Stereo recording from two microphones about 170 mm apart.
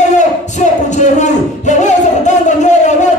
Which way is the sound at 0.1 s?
45° left (ahead or behind).